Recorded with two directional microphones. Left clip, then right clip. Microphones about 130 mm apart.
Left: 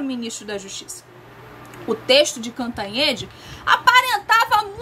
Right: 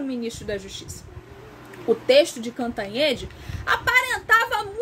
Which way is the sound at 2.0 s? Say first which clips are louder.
Left 2 dB; 30° left (ahead or behind).